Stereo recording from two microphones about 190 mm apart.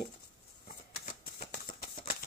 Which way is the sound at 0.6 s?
50° left (ahead or behind).